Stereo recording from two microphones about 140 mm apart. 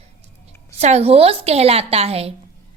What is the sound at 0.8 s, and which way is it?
A woman's voice, 50° right (ahead or behind).